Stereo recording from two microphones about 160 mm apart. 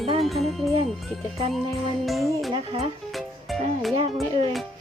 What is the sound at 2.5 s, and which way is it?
Speech, 35° right (ahead or behind).